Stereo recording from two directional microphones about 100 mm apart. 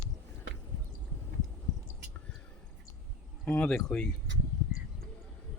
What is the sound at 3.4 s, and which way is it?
Speech, 15° left (ahead or behind).